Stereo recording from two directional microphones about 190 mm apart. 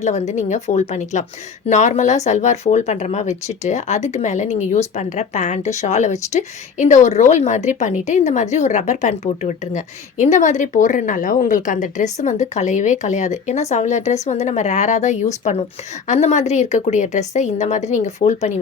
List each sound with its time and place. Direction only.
0.0 s speech: 35° left (ahead or behind)